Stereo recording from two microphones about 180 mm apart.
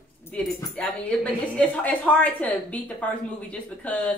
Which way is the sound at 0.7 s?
5° left (ahead or behind).